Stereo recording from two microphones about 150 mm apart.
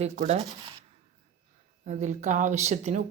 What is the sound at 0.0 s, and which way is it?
Speech, 45° right (ahead or behind).